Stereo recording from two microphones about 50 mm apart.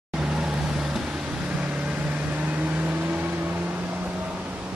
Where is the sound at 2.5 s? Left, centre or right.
Right.